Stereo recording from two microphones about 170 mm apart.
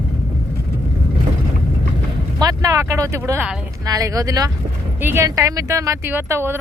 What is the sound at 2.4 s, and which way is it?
Speech, 20° right (ahead or behind).